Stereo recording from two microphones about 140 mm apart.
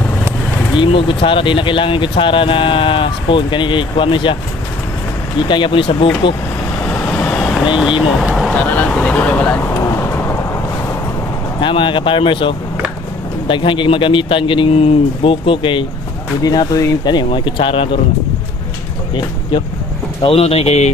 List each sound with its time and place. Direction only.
0.7 s speech: 35° left (ahead or behind)
5.5 s speech: 35° left (ahead or behind)
6.8 s vehicle: 15° left (ahead or behind)
8.2 s vehicle: centre (ahead or behind); by 10.3 s 20° left (ahead or behind)
11.6 s speech: 35° left (ahead or behind)
16.4 s speech: 25° left (ahead or behind)
20.2 s speech: 45° left (ahead or behind)